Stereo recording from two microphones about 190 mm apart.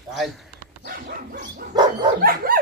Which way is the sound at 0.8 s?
55° right (ahead or behind).